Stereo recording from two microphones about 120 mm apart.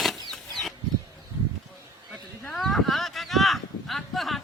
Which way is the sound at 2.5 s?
Centre (ahead or behind).